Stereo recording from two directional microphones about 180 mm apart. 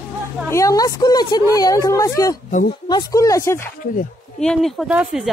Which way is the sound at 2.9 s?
20° left (ahead or behind).